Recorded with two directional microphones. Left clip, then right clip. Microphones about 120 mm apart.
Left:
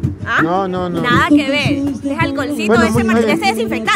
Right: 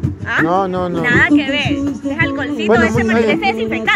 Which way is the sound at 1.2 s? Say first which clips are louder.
Even; 45° left (ahead or behind).